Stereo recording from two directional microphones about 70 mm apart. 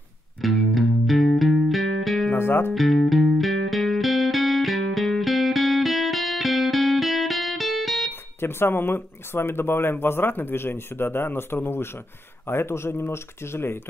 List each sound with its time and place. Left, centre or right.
0.4 s music: centre
2.3 s speech: left
2.7 s music: centre
8.1 s speech: left